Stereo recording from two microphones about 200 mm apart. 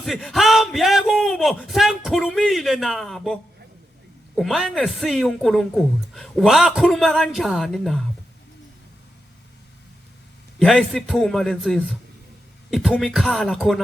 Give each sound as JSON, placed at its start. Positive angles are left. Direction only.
{"t": 0.0, "sound": "speech", "side_deg": 0}
{"t": 4.4, "sound": "speech", "side_deg": 0}
{"t": 10.6, "sound": "speech", "side_deg": 0}